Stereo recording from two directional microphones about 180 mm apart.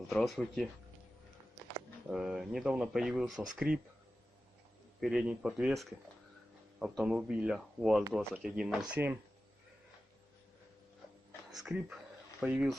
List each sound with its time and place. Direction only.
0.1 s speech: centre (ahead or behind)
2.0 s speech: 5° right (ahead or behind)
3.7 s speech: 55° right (ahead or behind)
4.9 s speech: centre (ahead or behind)
11.5 s speech: 5° right (ahead or behind)